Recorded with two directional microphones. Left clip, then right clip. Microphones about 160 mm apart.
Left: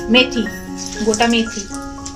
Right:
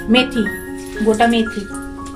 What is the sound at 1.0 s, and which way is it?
Speech, 90° right.